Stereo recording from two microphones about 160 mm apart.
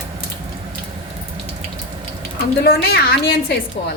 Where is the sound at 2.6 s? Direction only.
75° left (ahead or behind).